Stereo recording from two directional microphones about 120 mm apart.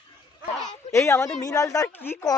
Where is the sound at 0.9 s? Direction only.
20° left (ahead or behind).